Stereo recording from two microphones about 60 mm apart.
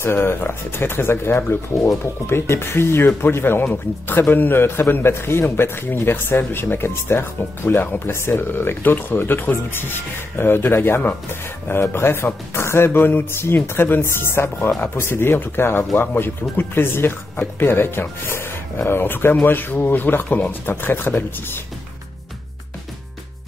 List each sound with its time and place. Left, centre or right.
0.0 s speech: left